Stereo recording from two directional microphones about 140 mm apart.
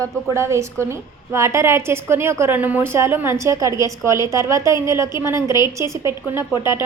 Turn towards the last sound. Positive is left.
turn(degrees=-20)  # may be behind; listen again after turning